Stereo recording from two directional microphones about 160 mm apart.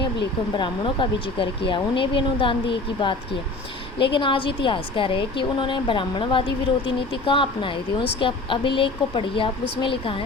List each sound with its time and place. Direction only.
0.5 s speech: 30° left (ahead or behind)